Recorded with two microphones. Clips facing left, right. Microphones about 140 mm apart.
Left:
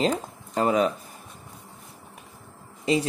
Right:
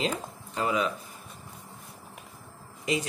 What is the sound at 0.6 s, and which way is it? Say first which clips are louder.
Speech: left 6 dB; 40° left (ahead or behind).